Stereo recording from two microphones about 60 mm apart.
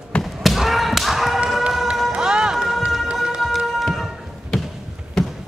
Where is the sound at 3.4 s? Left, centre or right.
Centre.